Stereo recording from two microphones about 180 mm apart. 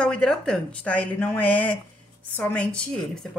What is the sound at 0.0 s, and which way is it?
Speech, 5° left (ahead or behind).